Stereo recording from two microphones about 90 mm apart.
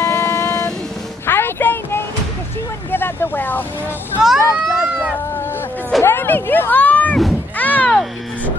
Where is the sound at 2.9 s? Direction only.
25° left (ahead or behind).